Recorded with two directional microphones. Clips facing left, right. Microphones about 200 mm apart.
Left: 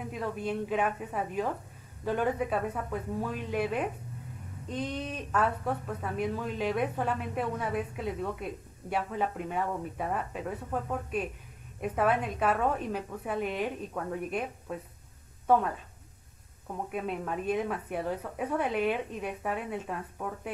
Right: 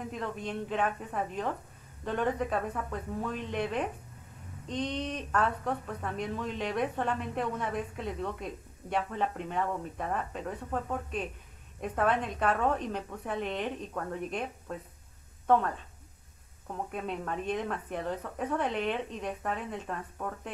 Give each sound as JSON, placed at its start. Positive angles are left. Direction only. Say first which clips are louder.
{"t": 0.0, "sound": "a woman's voice", "louder": "left 2 dB", "side_deg": 5}
{"t": 16.9, "sound": "speech", "louder": "left 2 dB", "side_deg": 5}